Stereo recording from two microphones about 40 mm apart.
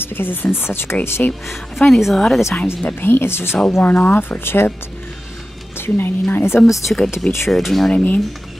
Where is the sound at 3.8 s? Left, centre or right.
Left.